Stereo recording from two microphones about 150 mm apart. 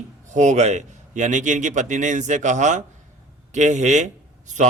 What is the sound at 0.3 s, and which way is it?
A man's voice, 55° right (ahead or behind).